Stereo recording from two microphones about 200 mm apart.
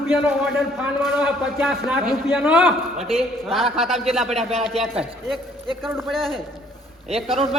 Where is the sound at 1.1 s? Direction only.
5° right (ahead or behind).